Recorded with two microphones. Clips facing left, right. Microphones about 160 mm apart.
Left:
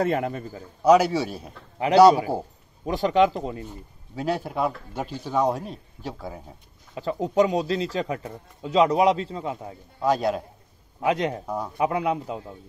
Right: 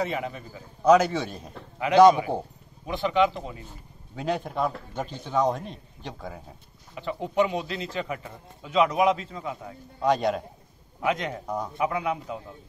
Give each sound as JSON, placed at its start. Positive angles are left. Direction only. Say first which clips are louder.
{"t": 0.0, "sound": "a man's voice", "louder": "left 5 dB", "side_deg": 50}
{"t": 0.8, "sound": "speech", "louder": "left 2 dB", "side_deg": 10}
{"t": 2.0, "sound": "speech", "louder": "left 1 dB", "side_deg": 35}
{"t": 4.1, "sound": "speech", "louder": "left 2 dB", "side_deg": 5}
{"t": 7.0, "sound": "speech", "louder": "left 4 dB", "side_deg": 40}
{"t": 10.0, "sound": "a man's voice", "louder": "left 1 dB", "side_deg": 0}
{"t": 11.0, "sound": "speech", "louder": "left 4 dB", "side_deg": 30}
{"t": 11.4, "sound": "a man's voice", "louder": "left 1 dB", "side_deg": 5}
{"t": 11.8, "sound": "speech", "louder": "left 4 dB", "side_deg": 30}